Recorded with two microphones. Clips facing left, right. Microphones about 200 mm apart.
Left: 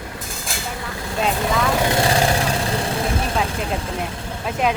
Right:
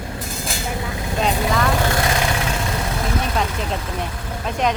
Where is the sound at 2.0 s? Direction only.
35° left (ahead or behind).